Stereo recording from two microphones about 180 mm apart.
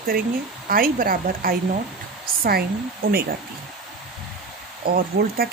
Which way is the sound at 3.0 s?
55° right (ahead or behind).